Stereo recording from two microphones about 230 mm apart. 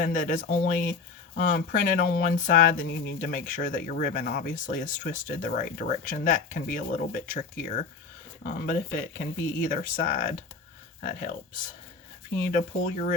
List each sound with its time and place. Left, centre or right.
0.0 s speech: left